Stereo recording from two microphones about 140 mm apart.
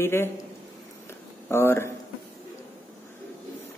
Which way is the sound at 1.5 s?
15° left (ahead or behind).